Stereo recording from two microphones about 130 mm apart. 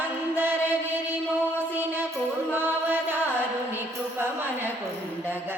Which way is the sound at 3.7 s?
15° right (ahead or behind).